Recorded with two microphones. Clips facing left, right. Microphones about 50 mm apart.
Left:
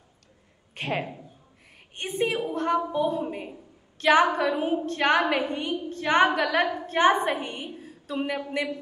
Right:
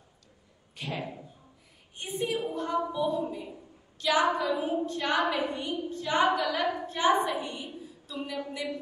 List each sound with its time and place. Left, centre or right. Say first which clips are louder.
0.7 s a woman's voice: left 6 dB; left
8.4 s speech: left 5 dB; left